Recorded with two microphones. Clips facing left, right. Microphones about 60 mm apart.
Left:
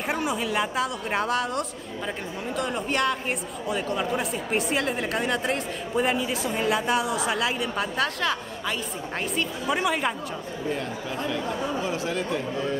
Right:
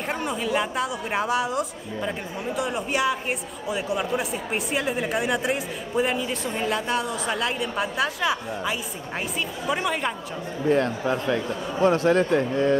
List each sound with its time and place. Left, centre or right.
0.0 s speech: centre
10.7 s speech: right